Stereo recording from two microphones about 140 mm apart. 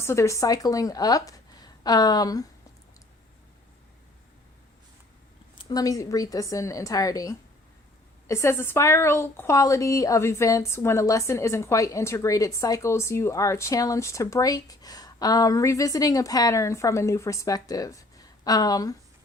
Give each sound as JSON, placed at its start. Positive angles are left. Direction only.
{"t": 0.0, "sound": "a woman's voice", "side_deg": 20}
{"t": 5.5, "sound": "a woman's voice", "side_deg": 30}